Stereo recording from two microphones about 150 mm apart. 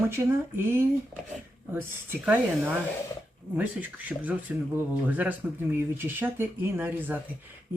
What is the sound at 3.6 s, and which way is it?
Speech, 10° right (ahead or behind).